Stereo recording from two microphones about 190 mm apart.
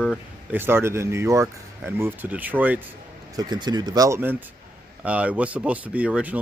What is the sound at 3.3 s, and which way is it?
Speech, 20° right (ahead or behind).